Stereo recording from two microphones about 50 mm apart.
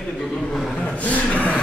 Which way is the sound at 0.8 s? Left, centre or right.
Left.